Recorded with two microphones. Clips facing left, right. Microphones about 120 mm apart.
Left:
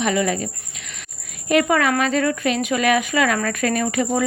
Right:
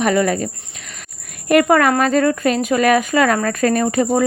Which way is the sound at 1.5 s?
50° right (ahead or behind).